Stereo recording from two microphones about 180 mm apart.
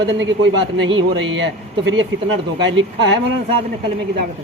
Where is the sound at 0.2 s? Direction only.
85° right.